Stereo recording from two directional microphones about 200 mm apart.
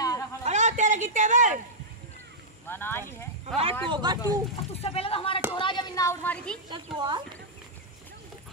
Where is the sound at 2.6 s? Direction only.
10° left (ahead or behind).